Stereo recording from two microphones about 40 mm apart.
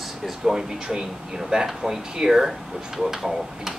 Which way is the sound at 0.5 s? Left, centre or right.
Centre.